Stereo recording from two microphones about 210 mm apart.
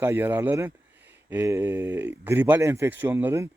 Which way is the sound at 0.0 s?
10° right (ahead or behind).